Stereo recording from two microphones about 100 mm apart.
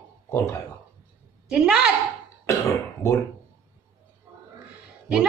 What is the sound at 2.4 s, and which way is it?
Throat clearing, 30° left (ahead or behind).